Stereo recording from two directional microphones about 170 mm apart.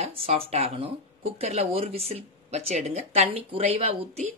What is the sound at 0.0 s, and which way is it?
Speech, 35° right (ahead or behind).